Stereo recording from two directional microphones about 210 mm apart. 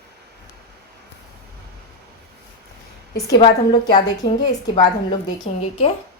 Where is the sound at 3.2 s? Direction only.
20° left (ahead or behind).